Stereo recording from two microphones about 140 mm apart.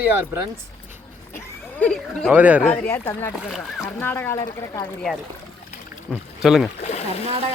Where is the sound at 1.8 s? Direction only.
5° left (ahead or behind).